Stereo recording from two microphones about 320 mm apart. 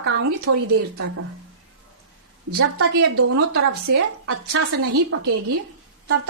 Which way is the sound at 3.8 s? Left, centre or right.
Right.